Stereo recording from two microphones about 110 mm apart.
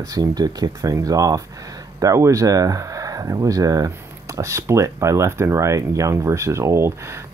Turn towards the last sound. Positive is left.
turn(degrees=-25)  # may be behind; listen again after turning